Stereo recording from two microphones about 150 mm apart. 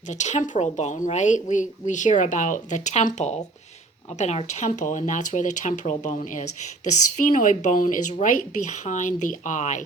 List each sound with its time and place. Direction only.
0.1 s a woman's voice: 50° left (ahead or behind)